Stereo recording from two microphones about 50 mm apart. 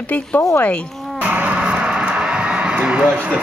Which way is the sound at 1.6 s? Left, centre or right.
Centre.